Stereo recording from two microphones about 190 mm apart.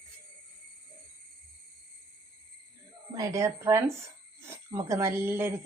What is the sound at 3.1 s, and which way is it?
Speech, 15° right (ahead or behind).